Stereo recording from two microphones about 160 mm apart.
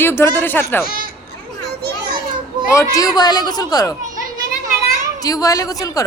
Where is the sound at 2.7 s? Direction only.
20° left (ahead or behind).